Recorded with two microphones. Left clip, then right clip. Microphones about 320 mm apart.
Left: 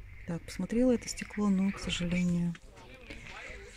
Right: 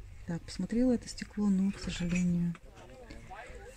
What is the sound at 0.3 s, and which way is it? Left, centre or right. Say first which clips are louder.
Speech: left 1 dB; centre.